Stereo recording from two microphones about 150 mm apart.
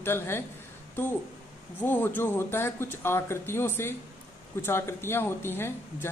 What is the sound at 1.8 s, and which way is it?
A woman's voice, 15° left (ahead or behind).